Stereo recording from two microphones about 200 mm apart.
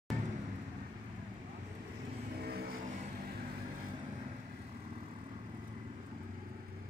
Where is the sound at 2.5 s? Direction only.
50° right (ahead or behind).